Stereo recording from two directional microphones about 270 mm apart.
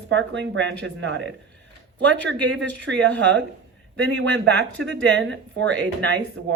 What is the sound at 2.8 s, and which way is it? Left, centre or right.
Speech, right.